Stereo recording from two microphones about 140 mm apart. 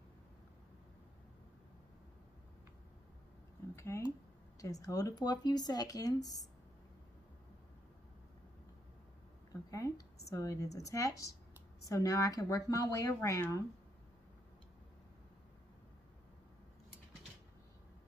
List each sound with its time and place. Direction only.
3.7 s speech: 20° left (ahead or behind)
9.7 s a sound: 25° left (ahead or behind)
10.3 s speech: 25° left (ahead or behind)